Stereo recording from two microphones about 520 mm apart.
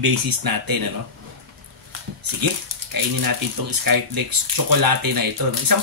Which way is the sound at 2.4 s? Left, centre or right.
Right.